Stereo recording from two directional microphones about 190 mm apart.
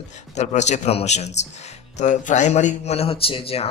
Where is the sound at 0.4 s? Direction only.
35° left (ahead or behind).